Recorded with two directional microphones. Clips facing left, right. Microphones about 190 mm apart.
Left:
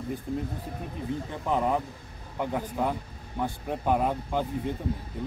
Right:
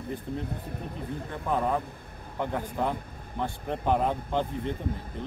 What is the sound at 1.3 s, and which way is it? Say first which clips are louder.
A man's voice: even; 15° left (ahead or behind).